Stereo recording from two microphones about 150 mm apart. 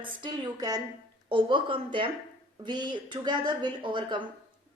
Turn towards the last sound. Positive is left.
turn(degrees=-35)  # may be behind; listen again after turning